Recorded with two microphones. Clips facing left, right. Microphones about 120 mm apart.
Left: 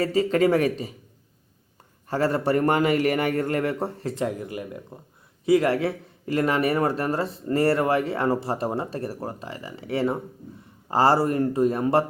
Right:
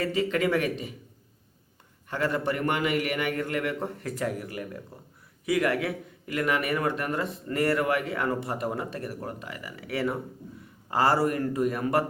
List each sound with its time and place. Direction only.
0.0 s a man's voice: 35° left (ahead or behind)
2.0 s a man's voice: 35° left (ahead or behind)